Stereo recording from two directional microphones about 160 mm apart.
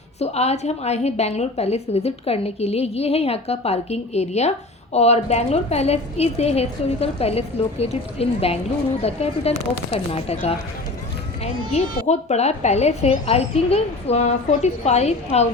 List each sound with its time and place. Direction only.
0.2 s a woman's voice: 40° left (ahead or behind)
11.7 s a child's voice: 45° left (ahead or behind)